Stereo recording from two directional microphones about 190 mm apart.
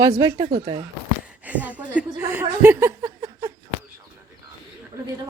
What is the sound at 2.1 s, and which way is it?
Chuckle, 10° right (ahead or behind).